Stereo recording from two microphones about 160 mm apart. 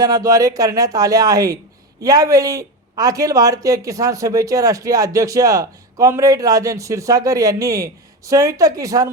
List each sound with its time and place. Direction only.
0.0 s speech: 20° right (ahead or behind)